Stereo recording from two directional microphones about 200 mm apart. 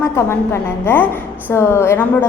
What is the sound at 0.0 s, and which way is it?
A woman's voice, 15° left (ahead or behind).